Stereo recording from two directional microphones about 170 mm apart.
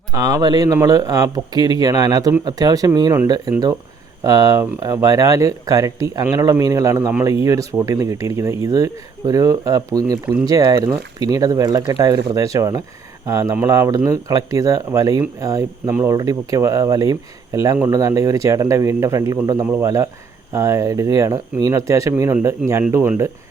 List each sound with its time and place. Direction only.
0.1 s speech: 20° right (ahead or behind)